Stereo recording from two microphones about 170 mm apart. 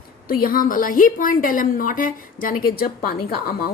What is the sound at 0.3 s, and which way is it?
A woman's voice, 55° left (ahead or behind).